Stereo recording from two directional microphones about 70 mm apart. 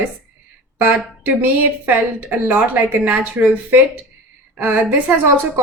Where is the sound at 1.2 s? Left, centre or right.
Right.